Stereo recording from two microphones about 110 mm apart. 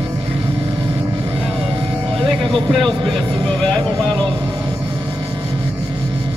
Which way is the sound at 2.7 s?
Centre (ahead or behind).